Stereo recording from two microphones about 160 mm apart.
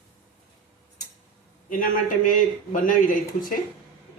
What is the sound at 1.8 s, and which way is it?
Speech, 55° left (ahead or behind).